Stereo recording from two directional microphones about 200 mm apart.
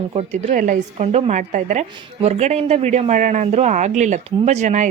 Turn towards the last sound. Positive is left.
turn(degrees=-35)  # may be behind; listen again after turning